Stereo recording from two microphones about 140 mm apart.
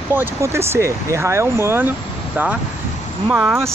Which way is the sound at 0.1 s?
15° right (ahead or behind).